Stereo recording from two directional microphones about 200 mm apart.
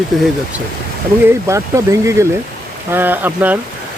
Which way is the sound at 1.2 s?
15° right (ahead or behind).